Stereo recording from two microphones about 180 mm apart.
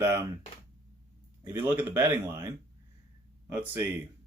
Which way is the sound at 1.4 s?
15° right (ahead or behind).